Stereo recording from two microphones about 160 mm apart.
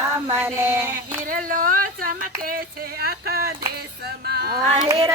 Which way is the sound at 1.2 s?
60° right (ahead or behind).